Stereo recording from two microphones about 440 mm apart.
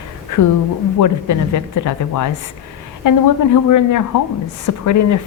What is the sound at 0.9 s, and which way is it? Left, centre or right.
A woman's voice, left.